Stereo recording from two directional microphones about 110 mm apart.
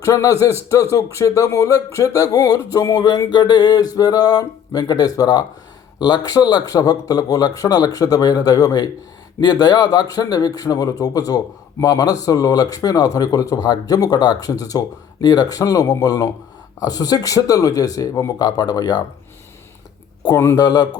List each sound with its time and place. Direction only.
0.0 s speech: 30° left (ahead or behind)
20.3 s speech: 20° left (ahead or behind)
20.6 s speech: 30° left (ahead or behind)